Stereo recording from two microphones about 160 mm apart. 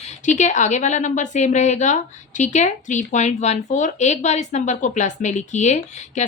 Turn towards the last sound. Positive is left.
turn(degrees=45)  # may be behind; listen again after turning